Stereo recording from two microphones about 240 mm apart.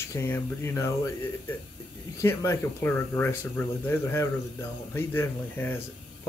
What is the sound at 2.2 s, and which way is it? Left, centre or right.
Speech, centre.